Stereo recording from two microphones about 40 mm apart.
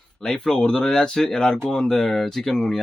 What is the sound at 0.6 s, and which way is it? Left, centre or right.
Speech, left.